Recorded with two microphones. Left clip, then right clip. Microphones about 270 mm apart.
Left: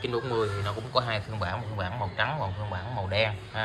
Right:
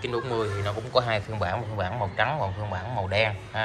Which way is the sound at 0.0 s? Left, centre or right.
Centre.